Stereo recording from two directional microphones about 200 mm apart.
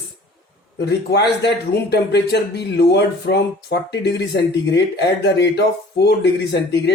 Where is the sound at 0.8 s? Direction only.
55° left (ahead or behind).